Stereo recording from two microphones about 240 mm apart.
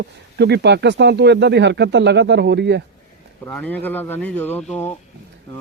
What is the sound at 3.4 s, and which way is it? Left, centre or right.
Speech, centre.